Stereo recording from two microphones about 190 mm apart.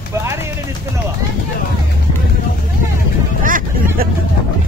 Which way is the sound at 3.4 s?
45° right (ahead or behind).